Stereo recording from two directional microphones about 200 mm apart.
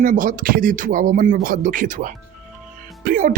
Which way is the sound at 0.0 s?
40° right (ahead or behind).